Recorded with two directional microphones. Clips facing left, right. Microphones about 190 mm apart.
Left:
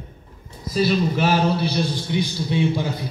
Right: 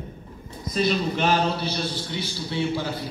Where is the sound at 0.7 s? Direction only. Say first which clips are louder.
Left 3 dB; 5° left (ahead or behind).